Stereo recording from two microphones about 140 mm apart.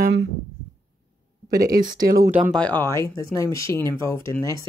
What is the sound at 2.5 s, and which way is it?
Speech, 10° left (ahead or behind).